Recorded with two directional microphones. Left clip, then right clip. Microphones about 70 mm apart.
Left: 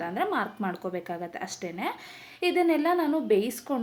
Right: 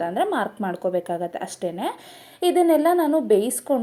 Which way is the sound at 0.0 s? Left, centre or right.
Right.